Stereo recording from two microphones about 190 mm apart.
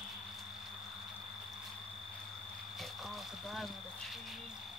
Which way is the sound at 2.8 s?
Centre (ahead or behind).